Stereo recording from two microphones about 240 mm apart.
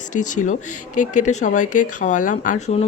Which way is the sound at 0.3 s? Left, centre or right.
Left.